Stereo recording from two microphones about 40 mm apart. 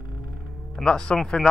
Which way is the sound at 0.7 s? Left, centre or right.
Centre.